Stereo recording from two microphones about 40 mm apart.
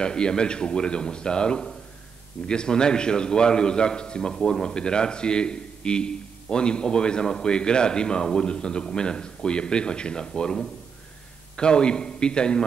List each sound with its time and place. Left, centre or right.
0.0 s a man's voice: left